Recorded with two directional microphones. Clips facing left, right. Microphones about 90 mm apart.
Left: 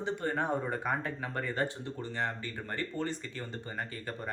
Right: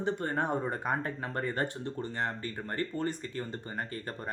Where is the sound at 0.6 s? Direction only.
30° right (ahead or behind).